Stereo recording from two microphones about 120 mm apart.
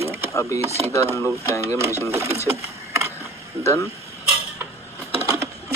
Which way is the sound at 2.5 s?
25° right (ahead or behind).